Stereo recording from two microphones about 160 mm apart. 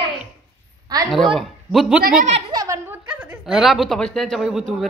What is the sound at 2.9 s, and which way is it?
A woman's voice, 10° right (ahead or behind).